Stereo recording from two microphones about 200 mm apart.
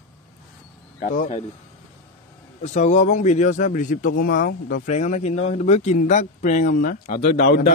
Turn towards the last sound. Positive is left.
turn(degrees=50)  # may be behind; listen again after turning